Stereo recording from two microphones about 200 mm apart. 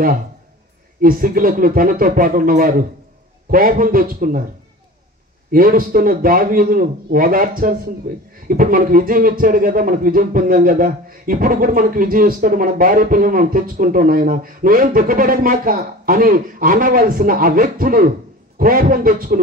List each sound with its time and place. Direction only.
1.0 s speech: 45° right (ahead or behind)
5.5 s speech: 45° right (ahead or behind)